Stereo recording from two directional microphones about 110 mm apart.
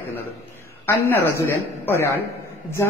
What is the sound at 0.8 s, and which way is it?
A man's voice, 20° left (ahead or behind).